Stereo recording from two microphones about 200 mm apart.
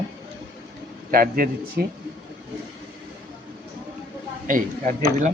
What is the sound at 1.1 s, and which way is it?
Speech, 45° right (ahead or behind).